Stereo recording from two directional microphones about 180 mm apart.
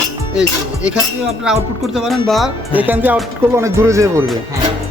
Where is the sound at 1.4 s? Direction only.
Centre (ahead or behind).